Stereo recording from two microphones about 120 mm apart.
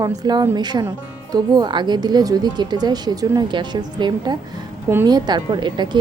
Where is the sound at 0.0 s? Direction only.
35° right (ahead or behind).